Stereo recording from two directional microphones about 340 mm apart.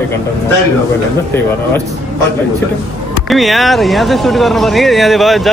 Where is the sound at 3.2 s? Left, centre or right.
Centre.